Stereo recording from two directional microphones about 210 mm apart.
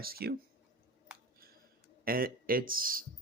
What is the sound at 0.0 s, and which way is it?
Speech, 45° right (ahead or behind).